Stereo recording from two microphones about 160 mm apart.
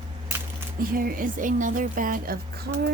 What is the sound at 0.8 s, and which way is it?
A woman's voice, 65° right (ahead or behind).